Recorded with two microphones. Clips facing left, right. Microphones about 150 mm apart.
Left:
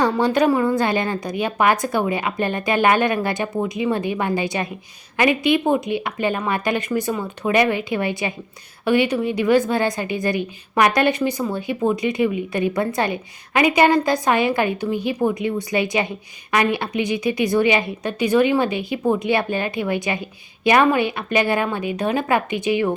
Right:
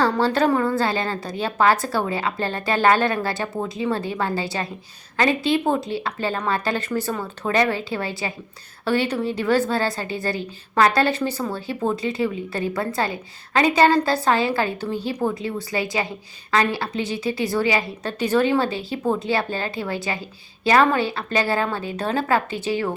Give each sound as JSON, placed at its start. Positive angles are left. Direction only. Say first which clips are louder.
{"t": 0.2, "sound": "a woman's voice", "louder": "left 2 dB", "side_deg": 15}